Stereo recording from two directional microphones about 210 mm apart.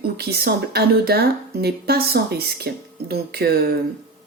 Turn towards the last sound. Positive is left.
turn(degrees=-45)  # may be behind; listen again after turning